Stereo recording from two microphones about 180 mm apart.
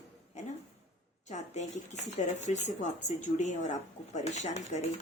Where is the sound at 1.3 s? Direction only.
40° left (ahead or behind).